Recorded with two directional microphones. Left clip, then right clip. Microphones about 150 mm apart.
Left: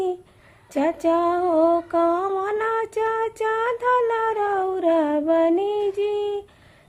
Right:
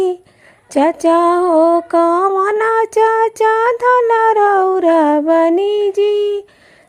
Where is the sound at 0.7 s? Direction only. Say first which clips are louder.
Right 9 dB; 40° right (ahead or behind).